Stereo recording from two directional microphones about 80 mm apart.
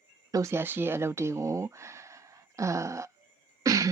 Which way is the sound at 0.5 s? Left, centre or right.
Right.